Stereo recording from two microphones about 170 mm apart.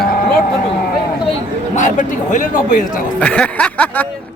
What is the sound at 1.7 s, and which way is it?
A man's voice, 45° left (ahead or behind).